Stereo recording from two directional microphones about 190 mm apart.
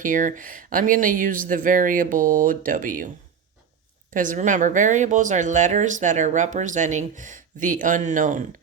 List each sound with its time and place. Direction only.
0.0 s speech: 45° right (ahead or behind)
4.1 s speech: 45° right (ahead or behind)